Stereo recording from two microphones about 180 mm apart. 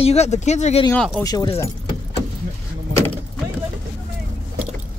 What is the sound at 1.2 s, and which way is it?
Speech, 20° left (ahead or behind).